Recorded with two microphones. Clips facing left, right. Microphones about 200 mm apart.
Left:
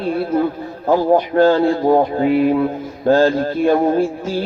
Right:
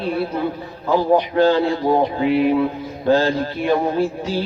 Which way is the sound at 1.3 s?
45° left (ahead or behind).